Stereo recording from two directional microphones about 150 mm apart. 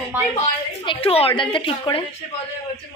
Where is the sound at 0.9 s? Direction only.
40° left (ahead or behind).